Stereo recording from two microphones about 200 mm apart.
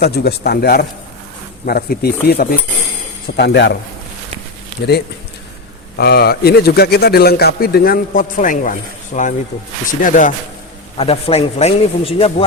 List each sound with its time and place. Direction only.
0.0 s speech: 55° left (ahead or behind)
6.0 s speech: 55° left (ahead or behind)
10.9 s a man's voice: 30° left (ahead or behind)